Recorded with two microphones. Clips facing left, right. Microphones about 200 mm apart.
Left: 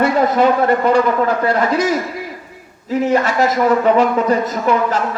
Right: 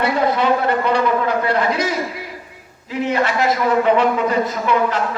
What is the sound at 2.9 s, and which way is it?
A man's voice, 45° left (ahead or behind).